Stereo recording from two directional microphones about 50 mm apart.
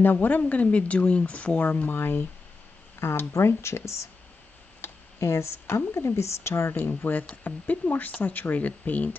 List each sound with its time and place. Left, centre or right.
0.0 s speech: left
1.7 s speech: left
3.3 s speech: left
4.8 s a sound: left
5.2 s speech: left
7.1 s speech: left